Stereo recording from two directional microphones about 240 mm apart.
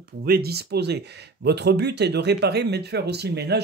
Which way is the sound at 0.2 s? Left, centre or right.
Right.